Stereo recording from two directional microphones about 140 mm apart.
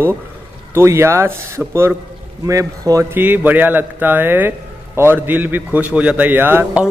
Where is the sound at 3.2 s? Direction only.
15° right (ahead or behind).